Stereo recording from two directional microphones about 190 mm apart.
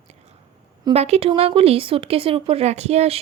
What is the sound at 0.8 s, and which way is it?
Speech, 35° right (ahead or behind).